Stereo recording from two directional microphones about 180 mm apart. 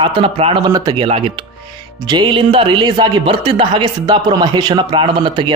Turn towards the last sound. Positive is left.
turn(degrees=-25)  # may be behind; listen again after turning